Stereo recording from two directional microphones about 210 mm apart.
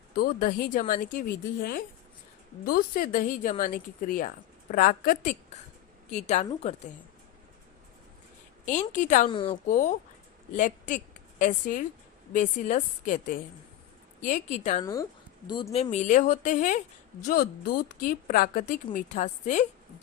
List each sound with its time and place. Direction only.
0.2 s speech: 45° left (ahead or behind)
2.6 s speech: 45° left (ahead or behind)
8.6 s speech: 35° left (ahead or behind)
9.3 s a woman's voice: 25° left (ahead or behind)
9.6 s a woman's voice: 40° left (ahead or behind)
15.4 s speech: 20° left (ahead or behind)